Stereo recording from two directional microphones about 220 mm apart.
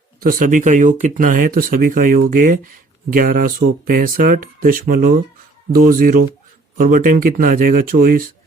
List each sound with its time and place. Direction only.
0.2 s speech: 40° right (ahead or behind)